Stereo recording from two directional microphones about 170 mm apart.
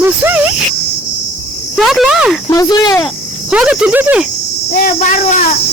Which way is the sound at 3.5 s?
5° right (ahead or behind).